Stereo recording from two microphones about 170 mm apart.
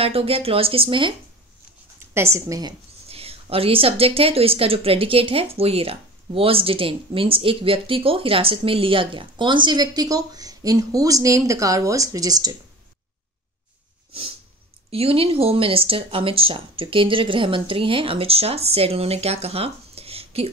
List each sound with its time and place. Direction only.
0.0 s a woman's voice: 35° right (ahead or behind)
2.0 s a woman's voice: 15° right (ahead or behind)
3.1 s a woman's voice: 35° right (ahead or behind)
14.9 s a woman's voice: 35° right (ahead or behind)